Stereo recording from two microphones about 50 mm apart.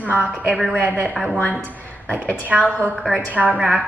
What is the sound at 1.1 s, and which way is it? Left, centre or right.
Speech, centre.